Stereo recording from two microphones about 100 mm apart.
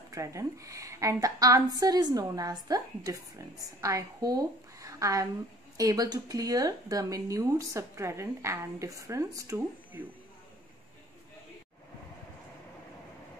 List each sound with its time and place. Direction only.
0.1 s a woman's voice: 30° right (ahead or behind)